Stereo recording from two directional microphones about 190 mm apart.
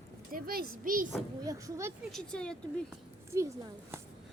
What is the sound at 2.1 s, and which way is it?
Speech, 5° left (ahead or behind).